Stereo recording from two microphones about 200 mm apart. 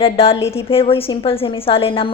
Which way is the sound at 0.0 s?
30° left (ahead or behind).